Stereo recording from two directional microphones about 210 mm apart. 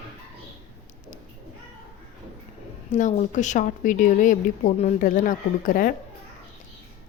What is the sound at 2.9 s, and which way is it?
Speech, 35° left (ahead or behind).